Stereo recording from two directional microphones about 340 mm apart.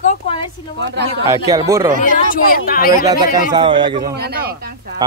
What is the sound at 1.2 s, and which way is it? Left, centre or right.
Speech, centre.